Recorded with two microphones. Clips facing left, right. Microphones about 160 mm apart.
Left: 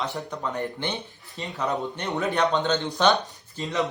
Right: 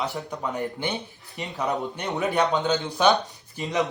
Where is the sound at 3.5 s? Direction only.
20° right (ahead or behind).